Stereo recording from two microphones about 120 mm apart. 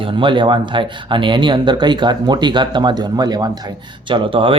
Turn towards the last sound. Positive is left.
turn(degrees=-45)  # may be behind; listen again after turning